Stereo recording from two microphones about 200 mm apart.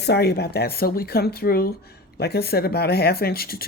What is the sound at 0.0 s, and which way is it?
Speech, 55° left (ahead or behind).